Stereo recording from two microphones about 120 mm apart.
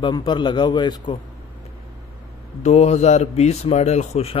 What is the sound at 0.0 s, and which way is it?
Speech, 40° left (ahead or behind).